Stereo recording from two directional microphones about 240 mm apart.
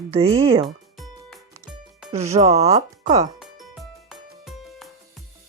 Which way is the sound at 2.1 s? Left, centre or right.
Right.